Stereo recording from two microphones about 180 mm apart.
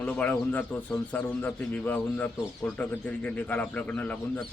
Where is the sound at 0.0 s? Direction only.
10° left (ahead or behind).